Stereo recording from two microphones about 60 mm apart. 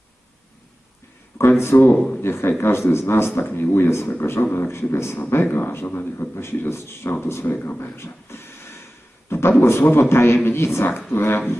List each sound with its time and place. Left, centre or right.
1.4 s a man's voice: left
7.9 s beatboxing: left
9.3 s a man's voice: left